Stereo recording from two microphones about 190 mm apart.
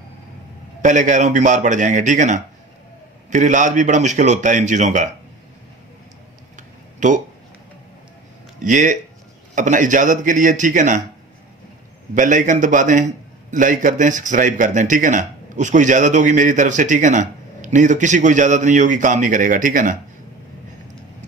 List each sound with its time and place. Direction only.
0.8 s a man's voice: 40° right (ahead or behind)
7.0 s speech: 40° right (ahead or behind)
8.5 s a man's voice: 40° right (ahead or behind)
12.2 s a man's voice: 40° right (ahead or behind)